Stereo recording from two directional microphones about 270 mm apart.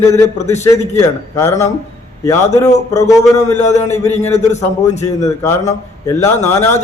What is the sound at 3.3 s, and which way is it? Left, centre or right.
A man's voice, left.